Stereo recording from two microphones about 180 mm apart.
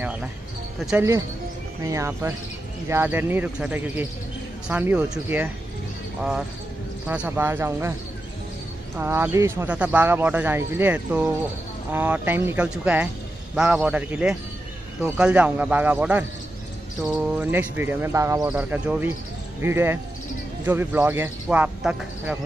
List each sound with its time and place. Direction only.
0.0 s music: 5° right (ahead or behind)
0.7 s speech: 5° right (ahead or behind)
1.9 s speech: 15° right (ahead or behind)
7.1 s speech: 10° right (ahead or behind)
8.9 s speech: 10° right (ahead or behind)